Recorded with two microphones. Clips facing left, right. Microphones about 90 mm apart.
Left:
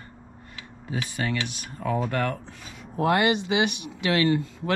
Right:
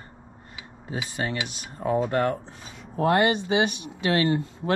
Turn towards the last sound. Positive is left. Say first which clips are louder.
# left 1 dB
turn(degrees=-35)  # may be behind; listen again after turning